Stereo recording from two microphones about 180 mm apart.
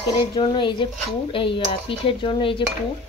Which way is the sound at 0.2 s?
25° left (ahead or behind).